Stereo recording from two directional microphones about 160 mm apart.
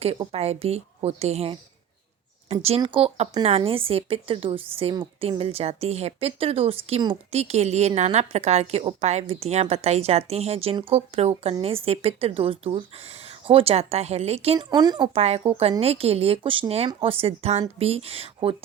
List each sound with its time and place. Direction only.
0.0 s a woman's voice: 40° right (ahead or behind)
14.7 s speech: 25° right (ahead or behind)
15.1 s a woman's voice: 40° right (ahead or behind)